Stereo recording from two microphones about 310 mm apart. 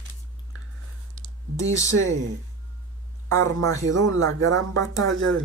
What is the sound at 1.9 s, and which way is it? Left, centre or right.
Speech, right.